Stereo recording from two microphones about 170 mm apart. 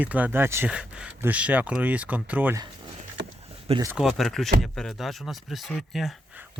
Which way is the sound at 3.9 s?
Centre (ahead or behind).